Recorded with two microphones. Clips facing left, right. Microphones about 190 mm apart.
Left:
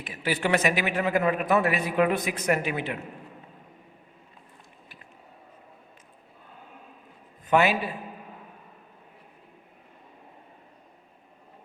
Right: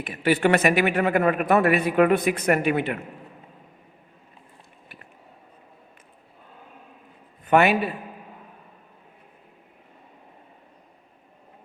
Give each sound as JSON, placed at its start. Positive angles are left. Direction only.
{"t": 0.0, "sound": "a man's voice", "side_deg": -60}
{"t": 7.4, "sound": "a man's voice", "side_deg": -60}